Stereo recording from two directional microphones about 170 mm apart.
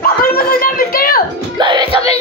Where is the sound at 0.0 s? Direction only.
60° left (ahead or behind).